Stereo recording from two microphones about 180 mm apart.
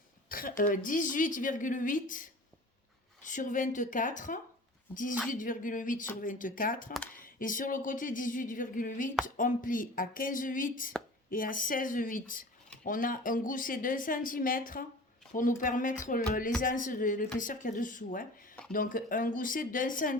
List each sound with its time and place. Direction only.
0.3 s a woman's voice: 50° left (ahead or behind)